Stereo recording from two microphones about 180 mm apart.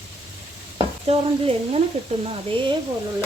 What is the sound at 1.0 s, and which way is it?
Speech, 35° right (ahead or behind).